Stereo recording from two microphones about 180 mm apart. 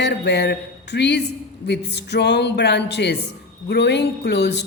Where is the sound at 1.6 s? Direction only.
70° left (ahead or behind).